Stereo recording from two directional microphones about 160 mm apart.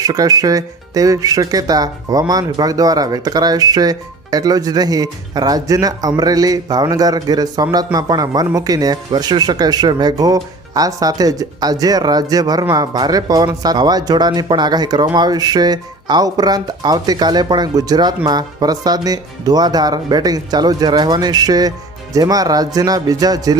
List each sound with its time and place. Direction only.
0.0 s speech: 25° right (ahead or behind)